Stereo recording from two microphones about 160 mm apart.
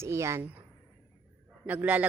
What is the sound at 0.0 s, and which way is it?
Speech, 15° right (ahead or behind).